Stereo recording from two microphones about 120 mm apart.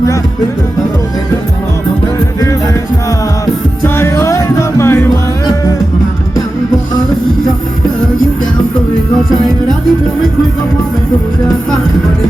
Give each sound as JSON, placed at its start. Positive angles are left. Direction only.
{"t": 3.4, "sound": "music", "side_deg": 20}